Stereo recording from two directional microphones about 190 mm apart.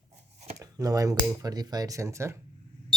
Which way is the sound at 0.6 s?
20° right (ahead or behind).